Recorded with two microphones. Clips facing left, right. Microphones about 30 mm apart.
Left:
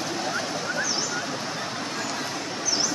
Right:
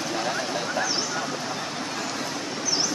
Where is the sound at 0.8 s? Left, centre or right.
Right.